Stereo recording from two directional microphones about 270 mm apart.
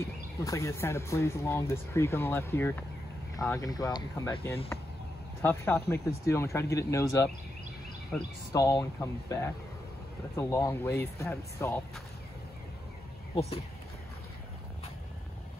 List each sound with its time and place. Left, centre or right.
0.5 s speech: centre
13.3 s speech: left